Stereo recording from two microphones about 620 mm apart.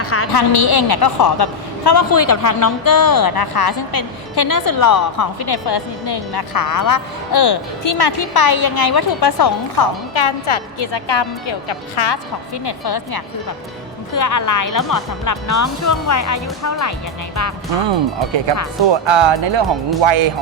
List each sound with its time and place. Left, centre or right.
0.0 s a sound: left
0.3 s a woman's voice: left
10.2 s a woman's voice: left
18.9 s speech: right